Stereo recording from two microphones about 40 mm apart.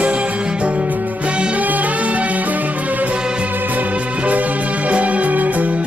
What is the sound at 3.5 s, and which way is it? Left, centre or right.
Music, right.